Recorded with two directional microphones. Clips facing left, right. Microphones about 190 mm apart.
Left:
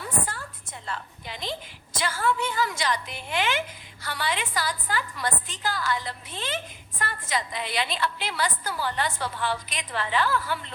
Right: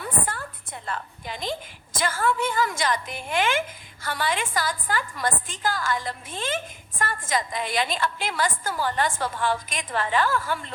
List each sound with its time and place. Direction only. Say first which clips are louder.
0.0 s a woman's voice: right 2 dB; 55° right (ahead or behind)